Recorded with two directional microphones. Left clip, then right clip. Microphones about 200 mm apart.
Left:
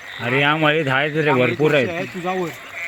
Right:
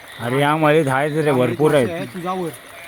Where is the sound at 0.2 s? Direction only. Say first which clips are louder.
Even; 15° right (ahead or behind).